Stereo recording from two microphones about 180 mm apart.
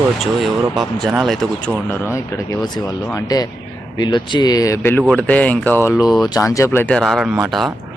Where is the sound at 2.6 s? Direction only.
20° left (ahead or behind).